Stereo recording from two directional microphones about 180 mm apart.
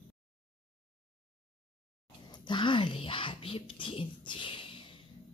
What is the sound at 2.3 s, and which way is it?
Speech, 25° left (ahead or behind).